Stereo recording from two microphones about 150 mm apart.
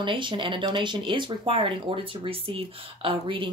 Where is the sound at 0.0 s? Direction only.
35° right (ahead or behind).